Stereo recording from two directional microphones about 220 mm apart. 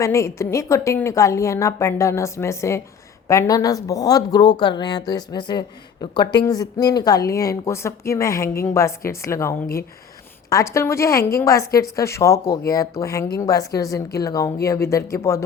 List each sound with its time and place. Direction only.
0.0 s speech: 15° left (ahead or behind)